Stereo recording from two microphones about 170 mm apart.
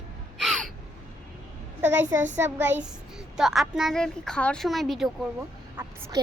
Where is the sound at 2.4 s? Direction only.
10° right (ahead or behind).